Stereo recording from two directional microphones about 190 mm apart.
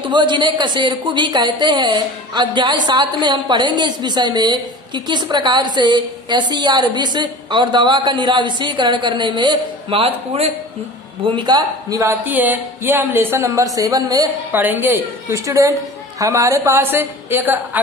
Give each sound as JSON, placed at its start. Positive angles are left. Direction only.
{"t": 0.1, "sound": "a woman's voice", "side_deg": -25}